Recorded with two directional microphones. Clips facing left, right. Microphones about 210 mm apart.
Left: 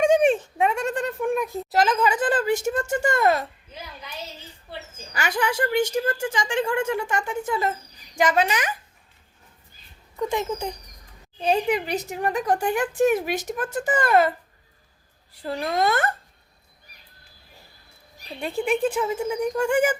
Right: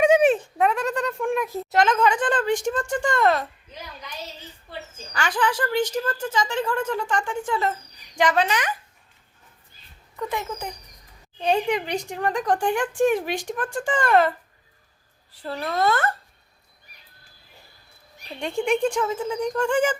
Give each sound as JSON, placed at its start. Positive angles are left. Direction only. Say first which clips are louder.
{"t": 0.0, "sound": "speech", "louder": "right 1 dB", "side_deg": -5}
{"t": 5.1, "sound": "speech", "louder": "even", "side_deg": 10}
{"t": 10.3, "sound": "speech", "louder": "left 4 dB", "side_deg": 25}
{"t": 11.3, "sound": "speech", "louder": "even", "side_deg": 5}
{"t": 15.4, "sound": "speech", "louder": "left 1 dB", "side_deg": 15}
{"t": 18.6, "sound": "speech", "louder": "right 1 dB", "side_deg": 5}